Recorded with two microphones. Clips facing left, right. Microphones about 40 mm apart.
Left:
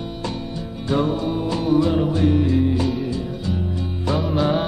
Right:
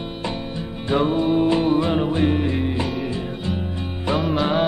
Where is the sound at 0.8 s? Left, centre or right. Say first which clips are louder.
Right 2 dB; right.